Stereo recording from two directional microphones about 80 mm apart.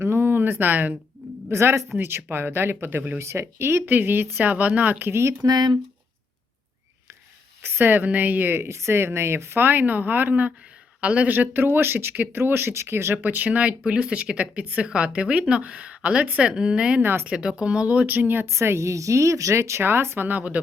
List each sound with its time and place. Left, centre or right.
0.0 s a sound: right
1.5 s speech: right
5.5 s speech: right
7.6 s speech: right
17.0 s speech: right
17.2 s speech: centre
18.4 s speech: right